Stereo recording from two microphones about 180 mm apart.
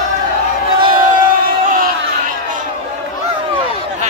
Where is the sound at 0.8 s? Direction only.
50° right (ahead or behind).